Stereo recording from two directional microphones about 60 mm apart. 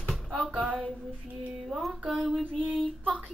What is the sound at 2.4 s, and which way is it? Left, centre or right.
Female singing, centre.